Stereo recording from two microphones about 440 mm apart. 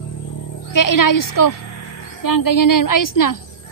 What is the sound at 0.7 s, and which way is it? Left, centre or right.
A woman's voice, left.